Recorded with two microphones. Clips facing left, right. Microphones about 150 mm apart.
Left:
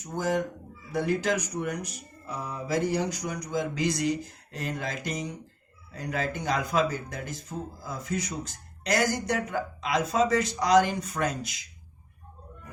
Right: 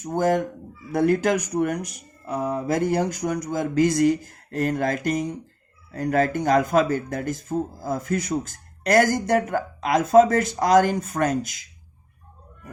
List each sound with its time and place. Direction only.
0.0 s speech: 55° right (ahead or behind)